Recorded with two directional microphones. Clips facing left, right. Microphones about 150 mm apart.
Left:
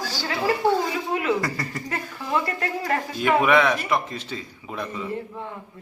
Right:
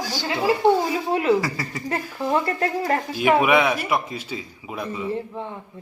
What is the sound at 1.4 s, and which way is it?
Speech, 5° right (ahead or behind).